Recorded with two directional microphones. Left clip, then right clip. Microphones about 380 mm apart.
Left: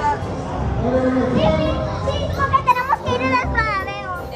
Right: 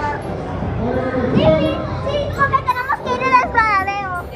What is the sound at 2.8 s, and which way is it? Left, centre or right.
Children playing, centre.